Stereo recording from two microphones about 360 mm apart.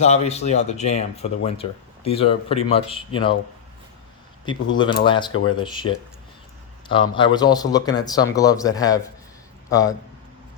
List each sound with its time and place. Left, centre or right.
0.0 s speech: centre
4.7 s a man's voice: centre